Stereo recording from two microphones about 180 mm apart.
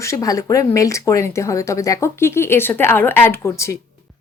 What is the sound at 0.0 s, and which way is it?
Speech, 20° left (ahead or behind).